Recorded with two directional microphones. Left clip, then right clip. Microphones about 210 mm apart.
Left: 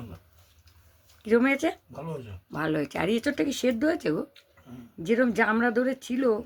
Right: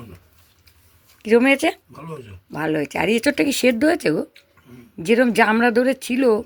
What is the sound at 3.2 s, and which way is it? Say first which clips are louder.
Speech: right 9 dB; 35° right (ahead or behind).